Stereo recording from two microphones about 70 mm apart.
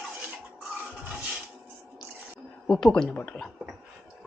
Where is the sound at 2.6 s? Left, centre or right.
Centre.